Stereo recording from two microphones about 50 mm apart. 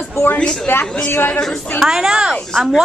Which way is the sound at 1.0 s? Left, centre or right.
Left.